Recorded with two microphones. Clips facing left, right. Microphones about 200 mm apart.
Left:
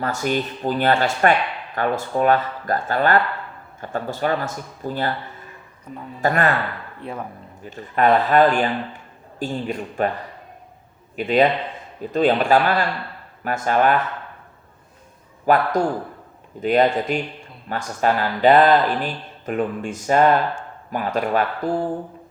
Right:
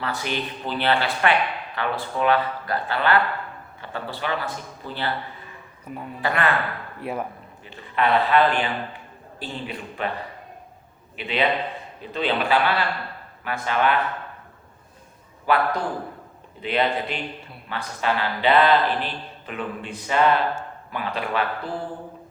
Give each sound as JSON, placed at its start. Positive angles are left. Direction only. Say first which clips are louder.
{"t": 0.0, "sound": "speech", "louder": "left 5 dB", "side_deg": 45}
{"t": 6.2, "sound": "speech", "louder": "left 4 dB", "side_deg": 45}
{"t": 7.0, "sound": "speech", "louder": "right 2 dB", "side_deg": -10}
{"t": 7.6, "sound": "speech", "louder": "left 5 dB", "side_deg": 45}
{"t": 11.2, "sound": "speech", "louder": "left 6 dB", "side_deg": 45}
{"t": 15.4, "sound": "speech", "louder": "left 4 dB", "side_deg": 45}